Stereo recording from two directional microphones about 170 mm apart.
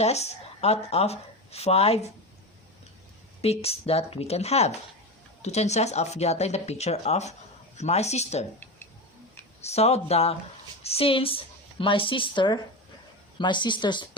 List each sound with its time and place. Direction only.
0.0 s speech: 40° left (ahead or behind)
3.4 s speech: 35° left (ahead or behind)
9.6 s a woman's voice: 40° left (ahead or behind)